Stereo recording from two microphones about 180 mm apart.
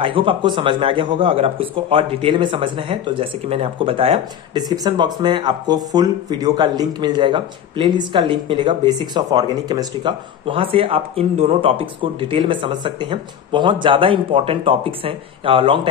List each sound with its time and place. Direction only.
0.0 s speech: 30° right (ahead or behind)